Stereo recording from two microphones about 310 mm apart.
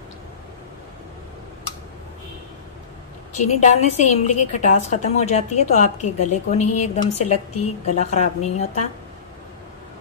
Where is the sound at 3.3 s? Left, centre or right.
Left.